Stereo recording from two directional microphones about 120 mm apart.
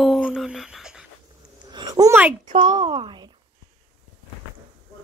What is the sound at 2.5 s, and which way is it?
Speech, 35° right (ahead or behind).